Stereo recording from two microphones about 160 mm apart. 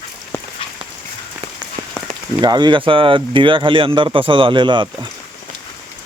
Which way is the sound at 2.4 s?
25° right (ahead or behind).